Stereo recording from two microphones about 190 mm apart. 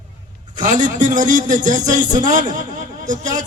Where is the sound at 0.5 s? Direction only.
40° right (ahead or behind).